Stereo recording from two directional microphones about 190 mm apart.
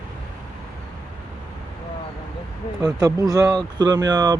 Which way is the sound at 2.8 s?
20° right (ahead or behind).